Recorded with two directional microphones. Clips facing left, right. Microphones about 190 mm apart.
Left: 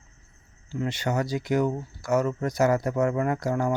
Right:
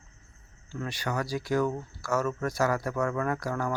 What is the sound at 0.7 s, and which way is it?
Speech, 20° left (ahead or behind).